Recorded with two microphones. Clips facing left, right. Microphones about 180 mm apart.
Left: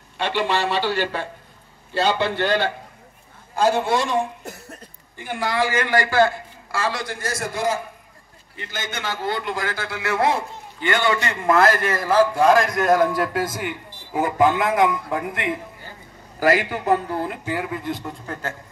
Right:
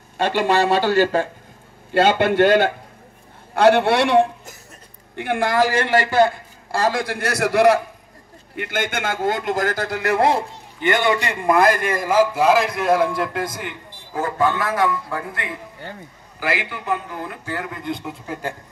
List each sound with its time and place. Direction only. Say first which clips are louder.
0.2 s a man's voice: right 4 dB; 45° right (ahead or behind)
3.5 s a man's voice: right 5 dB; 70° right (ahead or behind); by 5.7 s 50° right (ahead or behind)
5.7 s a man's voice: right 2 dB; 30° right (ahead or behind)
6.7 s a man's voice: right 5 dB; 45° right (ahead or behind); by 7.8 s 70° right (ahead or behind)
8.5 s a man's voice: right 7 dB; 55° right (ahead or behind); by 10.4 s 35° right (ahead or behind)
10.8 s a man's voice: right 2 dB; 20° right (ahead or behind); by 15.5 s 20° left (ahead or behind)
16.3 s a man's voice: left 6 dB; 40° left (ahead or behind)
17.5 s a man's voice: left 1 dB; 5° left (ahead or behind)
18.2 s speech: right 2 dB; 10° right (ahead or behind)